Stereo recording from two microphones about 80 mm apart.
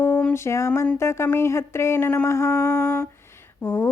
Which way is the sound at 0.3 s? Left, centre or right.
Left.